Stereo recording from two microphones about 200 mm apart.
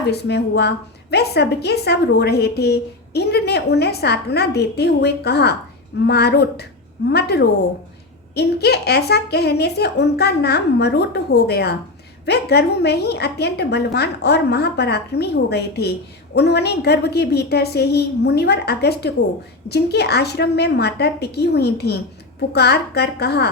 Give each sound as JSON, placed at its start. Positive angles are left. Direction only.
{"t": 0.1, "sound": "a woman's voice", "side_deg": 55}